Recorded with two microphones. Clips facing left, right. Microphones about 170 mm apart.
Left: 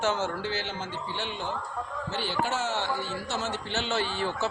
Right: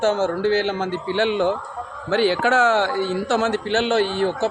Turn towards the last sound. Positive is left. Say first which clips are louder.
# right 9 dB
turn(degrees=-60)  # may be behind; listen again after turning